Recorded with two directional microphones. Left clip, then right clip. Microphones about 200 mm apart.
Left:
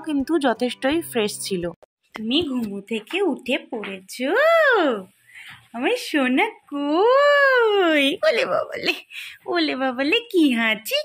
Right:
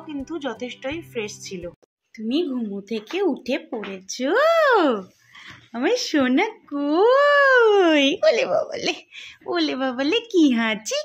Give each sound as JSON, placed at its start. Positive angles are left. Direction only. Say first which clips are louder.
{"t": 0.0, "sound": "speech", "louder": "left 9 dB", "side_deg": 45}
{"t": 2.5, "sound": "speech", "louder": "left 1 dB", "side_deg": 0}